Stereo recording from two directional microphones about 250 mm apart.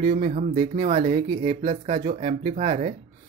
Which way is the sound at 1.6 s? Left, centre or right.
Right.